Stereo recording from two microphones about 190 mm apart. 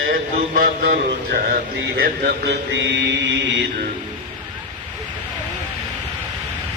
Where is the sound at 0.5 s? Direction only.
50° right (ahead or behind).